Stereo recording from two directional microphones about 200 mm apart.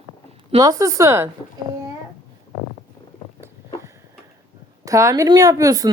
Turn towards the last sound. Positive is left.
turn(degrees=-15)  # may be behind; listen again after turning